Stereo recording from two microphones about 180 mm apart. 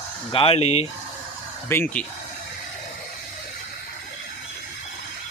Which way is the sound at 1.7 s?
10° left (ahead or behind).